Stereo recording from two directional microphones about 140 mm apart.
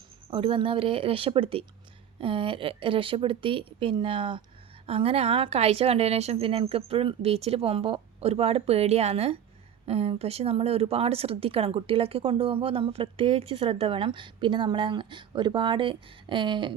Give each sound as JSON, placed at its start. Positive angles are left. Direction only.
{"t": 0.3, "sound": "a woman's voice", "side_deg": -40}